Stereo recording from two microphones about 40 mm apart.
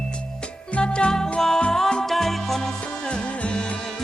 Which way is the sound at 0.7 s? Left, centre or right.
Left.